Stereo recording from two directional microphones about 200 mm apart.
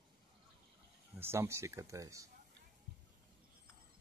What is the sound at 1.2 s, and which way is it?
Speech, 10° right (ahead or behind).